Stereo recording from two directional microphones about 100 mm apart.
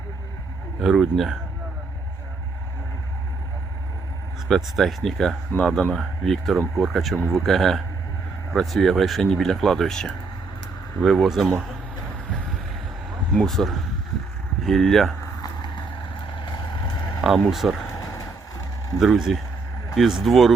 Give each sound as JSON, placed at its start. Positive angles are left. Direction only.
{"t": 0.8, "sound": "speech", "side_deg": 0}
{"t": 4.4, "sound": "speech", "side_deg": 0}
{"t": 13.3, "sound": "speech", "side_deg": 5}
{"t": 15.4, "sound": "vehicle", "side_deg": 40}
{"t": 17.2, "sound": "speech", "side_deg": 0}
{"t": 18.9, "sound": "speech", "side_deg": 0}